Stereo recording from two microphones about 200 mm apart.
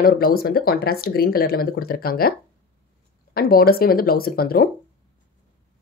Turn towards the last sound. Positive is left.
turn(degrees=50)  # may be behind; listen again after turning